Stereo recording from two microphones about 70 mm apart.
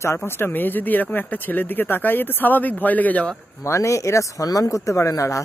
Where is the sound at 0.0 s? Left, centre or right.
Left.